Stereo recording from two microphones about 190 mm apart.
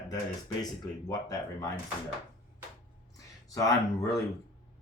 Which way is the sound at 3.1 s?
15° left (ahead or behind).